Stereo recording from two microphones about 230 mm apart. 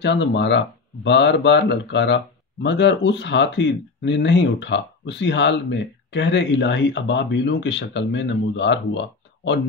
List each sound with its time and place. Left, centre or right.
0.0 s speech: left